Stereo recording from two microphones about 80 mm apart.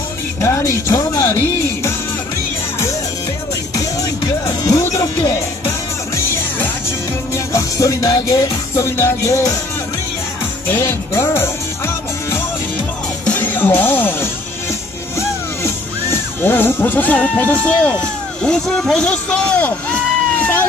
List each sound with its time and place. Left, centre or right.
0.4 s music: left
3.7 s music: left
7.3 s music: left
8.7 s music: left
10.7 s music: left
13.2 s music: left
18.0 s a sound: centre